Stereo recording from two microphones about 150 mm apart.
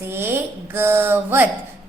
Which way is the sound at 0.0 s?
15° right (ahead or behind).